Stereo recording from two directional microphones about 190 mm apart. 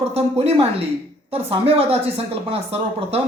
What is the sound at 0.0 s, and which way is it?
Speech, 30° right (ahead or behind).